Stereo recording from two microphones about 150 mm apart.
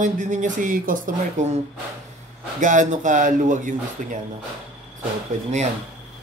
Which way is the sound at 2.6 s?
55° right (ahead or behind).